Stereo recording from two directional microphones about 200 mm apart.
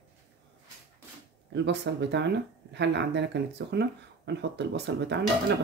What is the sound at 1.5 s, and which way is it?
Speech, 60° right (ahead or behind).